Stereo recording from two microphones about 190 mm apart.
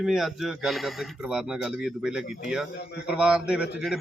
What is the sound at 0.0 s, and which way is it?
Speech, centre (ahead or behind).